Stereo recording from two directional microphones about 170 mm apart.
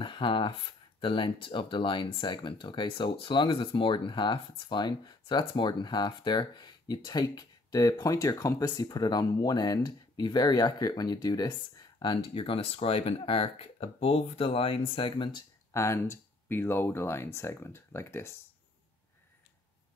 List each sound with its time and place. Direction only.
0.0 s speech: 30° left (ahead or behind)
15.7 s speech: 15° left (ahead or behind)